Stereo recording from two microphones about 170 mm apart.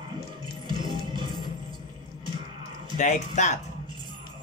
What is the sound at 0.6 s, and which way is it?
Music, 30° right (ahead or behind).